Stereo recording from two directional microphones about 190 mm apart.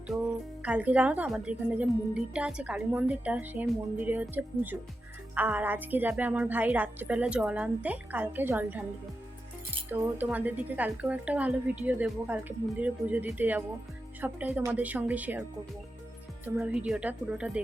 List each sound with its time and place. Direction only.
0.1 s a woman's voice: 15° right (ahead or behind)
9.9 s a woman's voice: 10° right (ahead or behind)
16.6 s speech: 5° right (ahead or behind)